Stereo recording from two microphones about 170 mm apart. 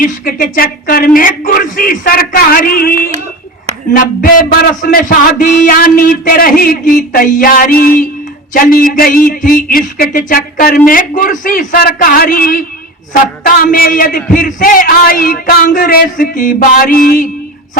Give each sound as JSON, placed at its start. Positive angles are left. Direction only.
{"t": 0.0, "sound": "a man's voice", "side_deg": 60}
{"t": 3.9, "sound": "a man's voice", "side_deg": 50}